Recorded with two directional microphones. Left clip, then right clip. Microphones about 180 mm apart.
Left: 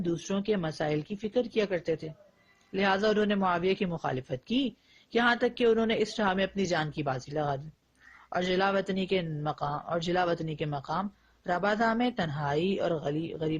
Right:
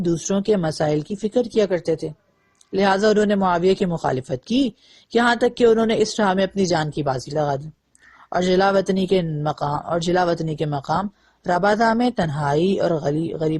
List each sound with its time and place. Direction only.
0.0 s speech: 35° right (ahead or behind)